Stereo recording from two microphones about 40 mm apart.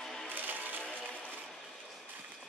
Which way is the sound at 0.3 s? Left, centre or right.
Right.